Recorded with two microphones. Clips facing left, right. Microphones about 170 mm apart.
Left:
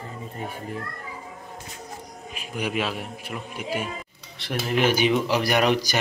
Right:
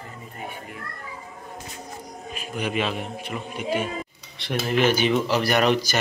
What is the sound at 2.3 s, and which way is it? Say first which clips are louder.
A man's voice: right 1 dB; 10° left (ahead or behind).